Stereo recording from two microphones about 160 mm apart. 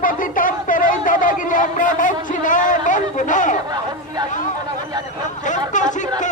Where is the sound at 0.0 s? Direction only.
60° left (ahead or behind).